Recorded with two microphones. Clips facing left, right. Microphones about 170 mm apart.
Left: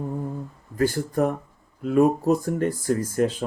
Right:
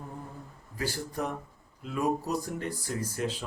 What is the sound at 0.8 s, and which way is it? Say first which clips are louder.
Speech: left 11 dB; 50° left (ahead or behind).